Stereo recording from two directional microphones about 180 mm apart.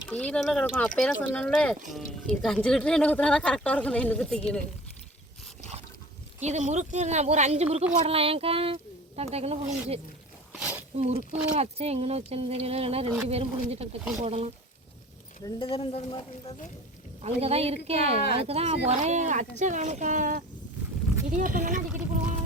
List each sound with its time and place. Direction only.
0.1 s speech: 5° left (ahead or behind)
6.4 s speech: 40° right (ahead or behind)
10.5 s a sound: 5° right (ahead or behind)
10.9 s speech: 35° right (ahead or behind)
15.4 s speech: 25° left (ahead or behind)
17.2 s speech: 35° right (ahead or behind)